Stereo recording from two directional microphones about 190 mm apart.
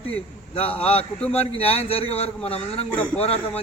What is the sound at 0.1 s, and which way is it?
A man's voice, 30° left (ahead or behind).